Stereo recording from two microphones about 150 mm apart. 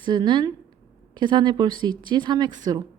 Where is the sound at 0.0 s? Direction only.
30° right (ahead or behind).